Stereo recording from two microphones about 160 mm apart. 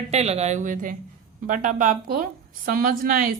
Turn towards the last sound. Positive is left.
turn(degrees=-60)  # may be behind; listen again after turning